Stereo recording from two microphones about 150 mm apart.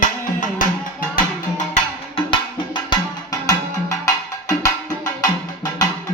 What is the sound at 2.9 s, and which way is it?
Music, 25° left (ahead or behind).